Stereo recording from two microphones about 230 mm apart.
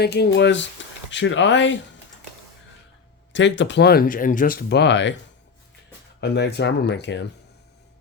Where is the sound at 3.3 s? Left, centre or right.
Left.